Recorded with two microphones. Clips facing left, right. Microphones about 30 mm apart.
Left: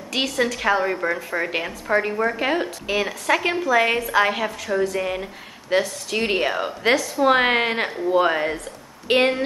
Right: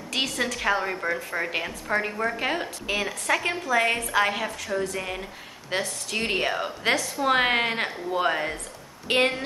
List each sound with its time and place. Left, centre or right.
0.1 s a woman's voice: centre